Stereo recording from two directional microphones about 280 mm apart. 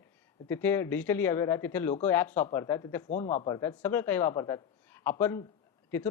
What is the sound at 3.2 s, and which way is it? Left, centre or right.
Speech, left.